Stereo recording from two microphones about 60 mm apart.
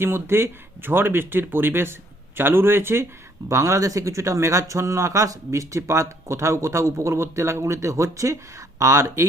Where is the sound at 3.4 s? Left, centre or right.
Right.